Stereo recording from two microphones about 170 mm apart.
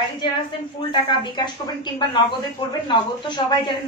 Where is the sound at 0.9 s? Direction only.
25° left (ahead or behind).